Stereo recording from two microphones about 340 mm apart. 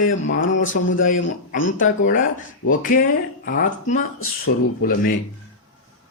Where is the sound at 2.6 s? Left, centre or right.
Left.